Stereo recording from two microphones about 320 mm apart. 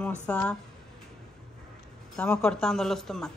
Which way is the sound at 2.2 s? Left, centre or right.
Centre.